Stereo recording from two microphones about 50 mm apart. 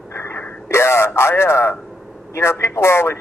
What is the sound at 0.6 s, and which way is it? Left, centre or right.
Speech, left.